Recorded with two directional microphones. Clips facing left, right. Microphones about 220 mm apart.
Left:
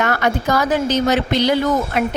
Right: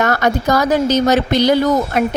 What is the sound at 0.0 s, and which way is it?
A woman's voice, 40° right (ahead or behind).